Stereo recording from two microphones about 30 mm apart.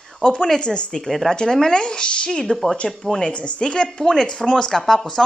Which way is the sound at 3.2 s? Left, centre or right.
Left.